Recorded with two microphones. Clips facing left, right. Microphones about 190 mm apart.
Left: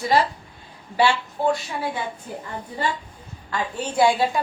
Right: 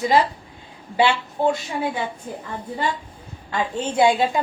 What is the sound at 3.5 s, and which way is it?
Speech, 20° right (ahead or behind).